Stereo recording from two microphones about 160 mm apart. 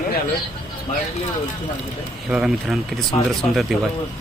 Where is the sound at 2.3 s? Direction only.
5° right (ahead or behind).